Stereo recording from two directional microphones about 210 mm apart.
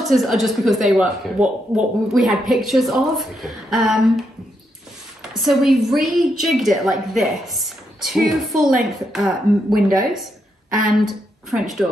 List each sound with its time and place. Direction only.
0.1 s a woman's voice: centre (ahead or behind)
5.3 s a woman's voice: centre (ahead or behind)
11.5 s a woman's voice: centre (ahead or behind)